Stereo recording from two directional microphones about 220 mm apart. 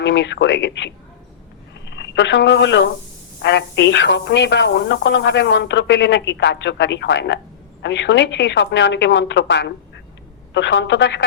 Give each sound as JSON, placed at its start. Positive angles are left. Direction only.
{"t": 0.0, "sound": "a woman's voice", "side_deg": 55}